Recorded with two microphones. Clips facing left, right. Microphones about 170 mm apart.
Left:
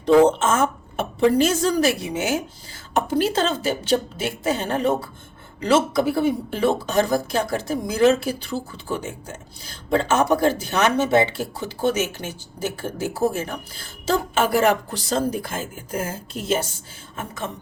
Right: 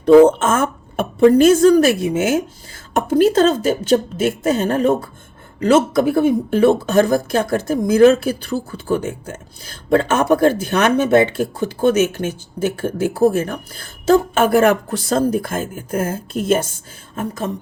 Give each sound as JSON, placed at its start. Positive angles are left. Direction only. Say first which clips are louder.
{"t": 0.0, "sound": "speech", "louder": "right 6 dB", "side_deg": -50}
{"t": 17.2, "sound": "speech", "louder": "right 7 dB", "side_deg": -40}